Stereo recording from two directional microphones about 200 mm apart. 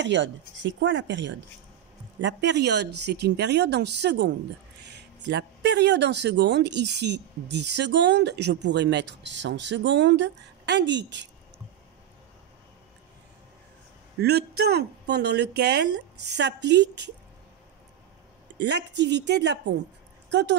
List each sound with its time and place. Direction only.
0.0 s speech: 65° right (ahead or behind)
14.2 s speech: 55° right (ahead or behind)
18.6 s speech: 60° right (ahead or behind)